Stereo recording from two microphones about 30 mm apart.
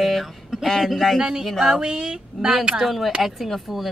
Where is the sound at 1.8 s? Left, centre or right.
Right.